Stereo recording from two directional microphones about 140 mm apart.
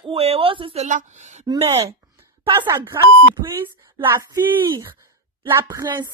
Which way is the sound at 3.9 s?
25° right (ahead or behind).